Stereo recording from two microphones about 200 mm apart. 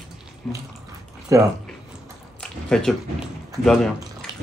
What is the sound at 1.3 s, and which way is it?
Speech, 15° right (ahead or behind).